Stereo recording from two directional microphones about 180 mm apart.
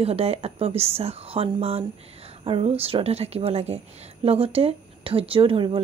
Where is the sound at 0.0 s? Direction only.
35° right (ahead or behind).